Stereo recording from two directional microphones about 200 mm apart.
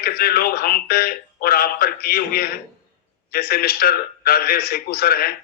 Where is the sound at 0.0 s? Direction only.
50° left (ahead or behind).